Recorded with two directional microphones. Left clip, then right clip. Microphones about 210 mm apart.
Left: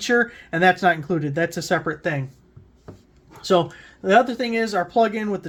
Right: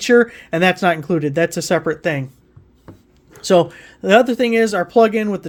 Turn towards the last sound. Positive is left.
turn(degrees=-35)  # may be behind; listen again after turning